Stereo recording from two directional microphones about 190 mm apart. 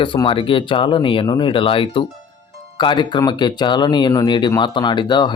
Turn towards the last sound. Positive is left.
turn(degrees=25)  # may be behind; listen again after turning